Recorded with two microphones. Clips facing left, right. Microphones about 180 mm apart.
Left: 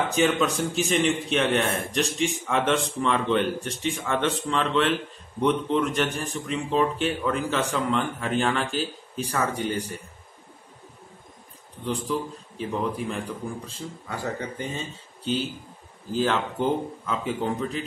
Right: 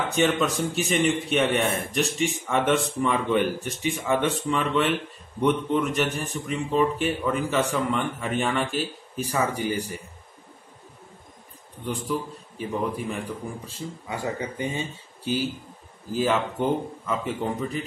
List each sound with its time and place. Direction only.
0.1 s a man's voice: centre (ahead or behind)
11.8 s a man's voice: 5° right (ahead or behind)
16.2 s a man's voice: 5° right (ahead or behind)